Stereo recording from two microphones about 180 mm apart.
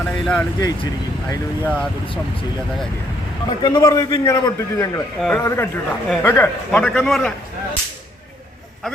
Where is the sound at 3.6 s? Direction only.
20° left (ahead or behind).